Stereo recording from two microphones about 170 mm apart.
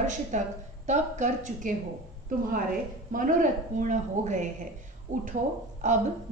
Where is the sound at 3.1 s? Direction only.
50° right (ahead or behind).